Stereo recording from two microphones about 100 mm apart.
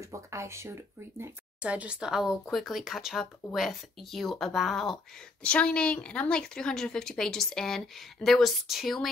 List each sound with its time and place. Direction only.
0.0 s speech: 30° right (ahead or behind)
1.6 s speech: 10° right (ahead or behind)